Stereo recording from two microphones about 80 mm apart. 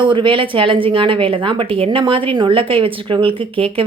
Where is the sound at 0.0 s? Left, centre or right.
Right.